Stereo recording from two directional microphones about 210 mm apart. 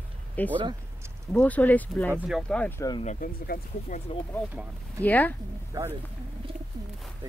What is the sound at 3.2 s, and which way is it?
Speech, 45° left (ahead or behind).